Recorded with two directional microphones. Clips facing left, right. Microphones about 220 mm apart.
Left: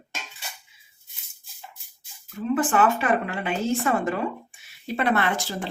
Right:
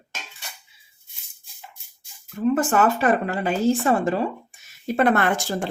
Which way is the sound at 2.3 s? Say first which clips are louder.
Right 2 dB; 40° right (ahead or behind).